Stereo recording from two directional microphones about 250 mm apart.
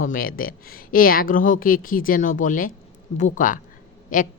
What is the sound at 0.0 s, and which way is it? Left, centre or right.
A woman's voice, left.